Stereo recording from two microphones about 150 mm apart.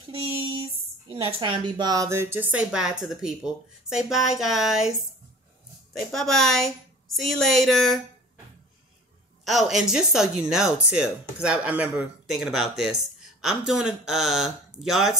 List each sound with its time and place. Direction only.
1.1 s speech: 30° right (ahead or behind); by 4.9 s 5° right (ahead or behind)
5.9 s speech: centre (ahead or behind)
9.4 s speech: centre (ahead or behind)